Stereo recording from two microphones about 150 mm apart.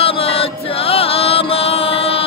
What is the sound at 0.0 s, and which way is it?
Chant, 40° left (ahead or behind).